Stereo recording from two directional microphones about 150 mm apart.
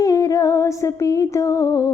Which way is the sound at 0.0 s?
25° left (ahead or behind).